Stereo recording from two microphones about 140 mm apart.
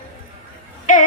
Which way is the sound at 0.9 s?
65° left (ahead or behind).